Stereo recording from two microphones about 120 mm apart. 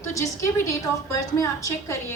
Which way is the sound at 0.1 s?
25° left (ahead or behind).